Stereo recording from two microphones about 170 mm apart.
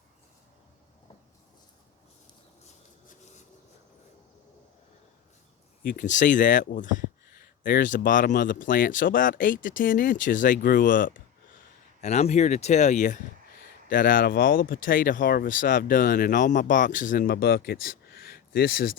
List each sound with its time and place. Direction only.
5.8 s speech: 55° left (ahead or behind)
11.9 s speech: 40° left (ahead or behind); by 18.9 s 60° left (ahead or behind)